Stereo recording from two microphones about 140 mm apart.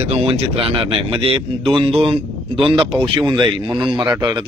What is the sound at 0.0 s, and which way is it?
Speech, 45° right (ahead or behind).